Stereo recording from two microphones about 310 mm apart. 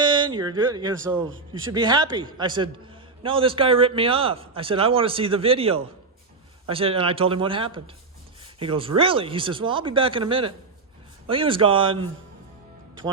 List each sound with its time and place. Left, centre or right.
0.0 s a man's voice: centre